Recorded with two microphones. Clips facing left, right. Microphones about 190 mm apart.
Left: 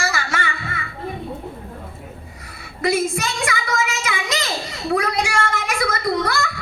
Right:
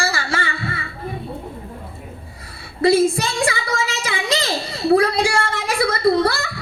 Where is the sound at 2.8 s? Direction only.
30° right (ahead or behind).